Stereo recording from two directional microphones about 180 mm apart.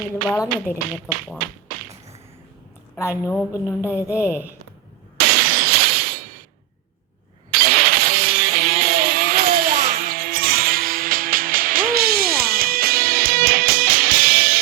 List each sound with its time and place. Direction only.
0.3 s speech: 10° left (ahead or behind)
2.9 s a woman's voice: 15° left (ahead or behind)
3.8 s a woman's voice: 10° right (ahead or behind)
5.1 s shatter: 60° right (ahead or behind)
7.5 s music: 60° right (ahead or behind)